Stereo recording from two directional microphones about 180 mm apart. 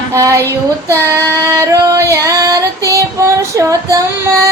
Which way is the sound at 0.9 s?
15° right (ahead or behind).